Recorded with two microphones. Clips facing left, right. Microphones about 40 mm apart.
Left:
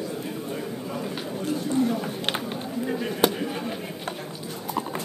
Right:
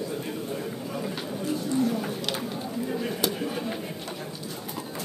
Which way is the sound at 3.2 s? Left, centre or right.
Left.